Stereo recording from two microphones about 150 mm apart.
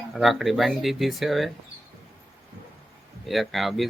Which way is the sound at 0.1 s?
Centre (ahead or behind).